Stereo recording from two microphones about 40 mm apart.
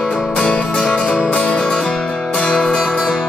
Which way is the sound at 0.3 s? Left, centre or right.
Left.